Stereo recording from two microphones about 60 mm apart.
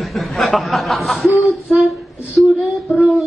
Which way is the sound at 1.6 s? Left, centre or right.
Centre.